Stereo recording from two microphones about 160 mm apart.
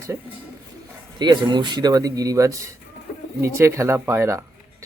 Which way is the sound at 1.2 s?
30° right (ahead or behind).